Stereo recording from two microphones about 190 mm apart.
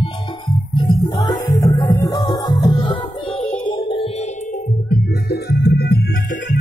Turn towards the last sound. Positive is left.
turn(degrees=55)  # may be behind; listen again after turning